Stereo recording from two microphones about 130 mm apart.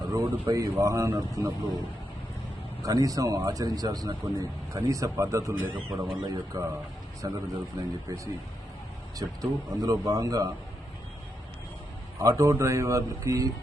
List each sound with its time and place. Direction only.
0.1 s speech: 30° right (ahead or behind)
2.8 s speech: 25° right (ahead or behind)
9.1 s speech: 25° right (ahead or behind)
12.2 s speech: 25° right (ahead or behind)